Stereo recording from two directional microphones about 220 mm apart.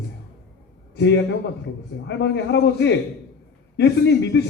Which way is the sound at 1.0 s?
55° left (ahead or behind).